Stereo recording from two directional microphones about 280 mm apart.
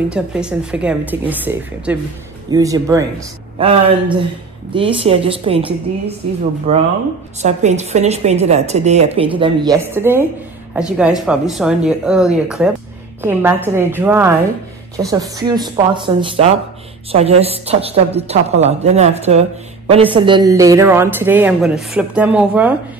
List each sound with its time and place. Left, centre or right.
0.1 s a woman's voice: centre
6.7 s a woman's voice: right; by 22.8 s centre